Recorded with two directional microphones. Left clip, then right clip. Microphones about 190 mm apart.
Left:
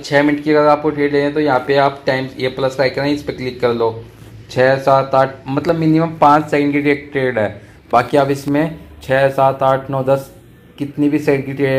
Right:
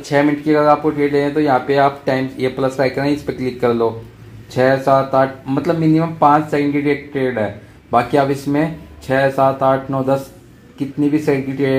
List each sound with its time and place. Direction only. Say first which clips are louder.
0.1 s speech: left 2 dB; centre (ahead or behind)
2.8 s speech: left 1 dB; 15° right (ahead or behind)
3.6 s speech: left 1 dB; centre (ahead or behind); by 8.1 s 15° left (ahead or behind)
8.3 s speech: left 1 dB; centre (ahead or behind)
11.0 s speech: left 1 dB; centre (ahead or behind)